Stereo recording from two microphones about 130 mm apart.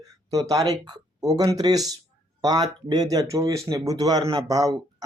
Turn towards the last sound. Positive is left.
turn(degrees=-25)  # may be behind; listen again after turning